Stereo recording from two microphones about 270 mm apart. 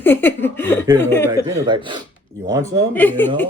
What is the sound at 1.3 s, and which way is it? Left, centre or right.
Speech, centre.